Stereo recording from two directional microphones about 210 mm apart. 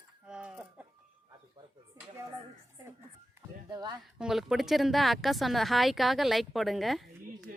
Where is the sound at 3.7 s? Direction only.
20° right (ahead or behind).